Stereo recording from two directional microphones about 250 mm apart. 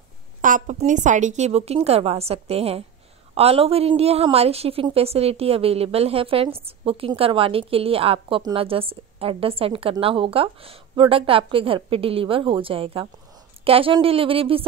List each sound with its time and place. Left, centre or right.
0.4 s a woman's voice: right